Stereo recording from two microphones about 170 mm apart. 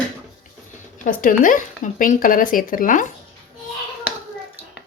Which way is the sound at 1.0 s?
55° left (ahead or behind).